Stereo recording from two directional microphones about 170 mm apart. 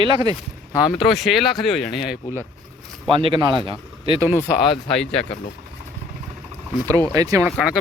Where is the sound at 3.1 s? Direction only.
30° right (ahead or behind).